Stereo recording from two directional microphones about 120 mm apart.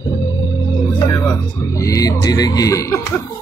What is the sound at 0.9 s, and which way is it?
Speech, 25° left (ahead or behind).